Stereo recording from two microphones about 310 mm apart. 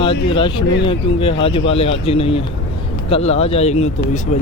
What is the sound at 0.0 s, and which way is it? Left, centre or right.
Speech, centre.